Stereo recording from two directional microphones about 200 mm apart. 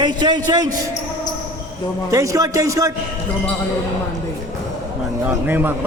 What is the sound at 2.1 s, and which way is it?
Speech, 15° right (ahead or behind).